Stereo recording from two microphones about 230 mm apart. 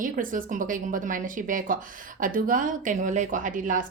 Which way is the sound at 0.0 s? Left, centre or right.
Right.